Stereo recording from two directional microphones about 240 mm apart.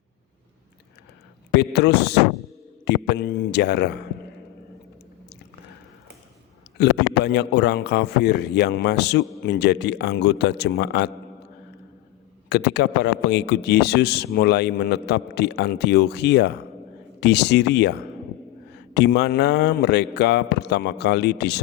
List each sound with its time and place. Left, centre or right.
1.5 s a man's voice: left
6.7 s a man's voice: left
12.5 s a man's voice: left
18.9 s a man's voice: left